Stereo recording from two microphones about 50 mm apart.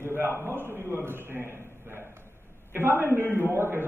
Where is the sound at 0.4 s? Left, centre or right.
Right.